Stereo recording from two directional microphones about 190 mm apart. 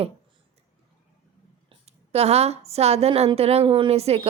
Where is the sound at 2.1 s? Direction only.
35° right (ahead or behind).